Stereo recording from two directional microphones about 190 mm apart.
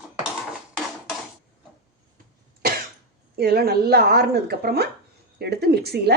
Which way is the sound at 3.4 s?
55° right (ahead or behind).